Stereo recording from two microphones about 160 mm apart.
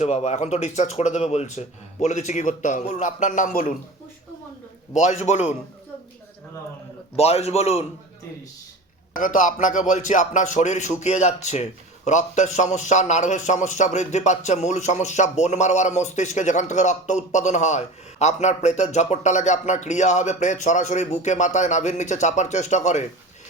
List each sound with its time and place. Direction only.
0.0 s a man's voice: 40° left (ahead or behind)
4.9 s a man's voice: 50° left (ahead or behind)
7.2 s a man's voice: 40° left (ahead or behind)
9.1 s a man's voice: 55° left (ahead or behind)